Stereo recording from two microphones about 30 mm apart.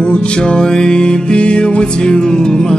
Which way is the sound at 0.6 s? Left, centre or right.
Left.